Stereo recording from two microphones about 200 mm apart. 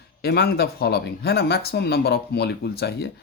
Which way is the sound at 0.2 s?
50° left (ahead or behind).